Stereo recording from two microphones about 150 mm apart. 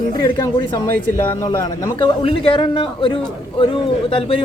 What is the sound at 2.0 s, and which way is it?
A man's voice, 35° left (ahead or behind).